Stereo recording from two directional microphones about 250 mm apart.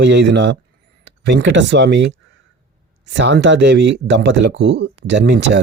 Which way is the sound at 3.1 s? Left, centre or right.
Right.